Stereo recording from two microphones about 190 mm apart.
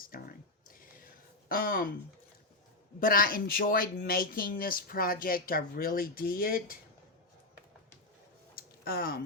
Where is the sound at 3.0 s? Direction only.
50° left (ahead or behind).